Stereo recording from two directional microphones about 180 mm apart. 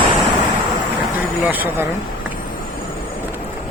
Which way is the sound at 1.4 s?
10° right (ahead or behind).